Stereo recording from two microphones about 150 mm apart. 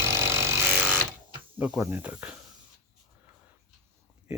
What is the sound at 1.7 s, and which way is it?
Speech, 10° right (ahead or behind).